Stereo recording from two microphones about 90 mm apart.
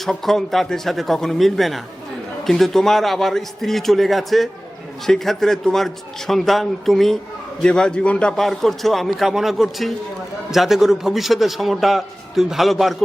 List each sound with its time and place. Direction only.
0.0 s a man's voice: 5° left (ahead or behind)